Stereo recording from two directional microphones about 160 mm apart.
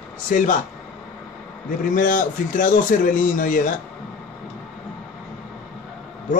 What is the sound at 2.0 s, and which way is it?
Speech, 55° left (ahead or behind).